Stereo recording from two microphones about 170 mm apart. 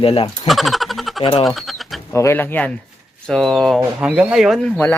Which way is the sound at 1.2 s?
30° left (ahead or behind).